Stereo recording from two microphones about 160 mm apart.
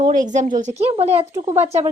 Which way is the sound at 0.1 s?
50° right (ahead or behind).